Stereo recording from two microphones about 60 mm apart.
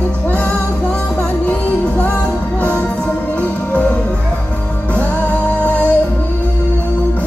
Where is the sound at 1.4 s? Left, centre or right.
Left.